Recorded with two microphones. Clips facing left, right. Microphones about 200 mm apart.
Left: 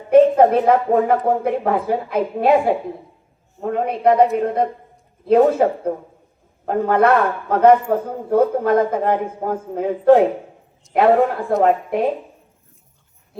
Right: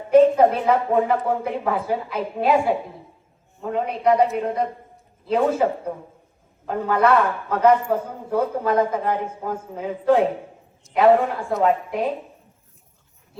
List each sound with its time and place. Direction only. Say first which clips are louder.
0.3 s a man's voice: left 4 dB; 40° left (ahead or behind)